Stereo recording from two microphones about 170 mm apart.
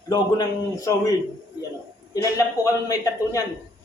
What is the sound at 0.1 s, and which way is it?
Speech, 20° left (ahead or behind).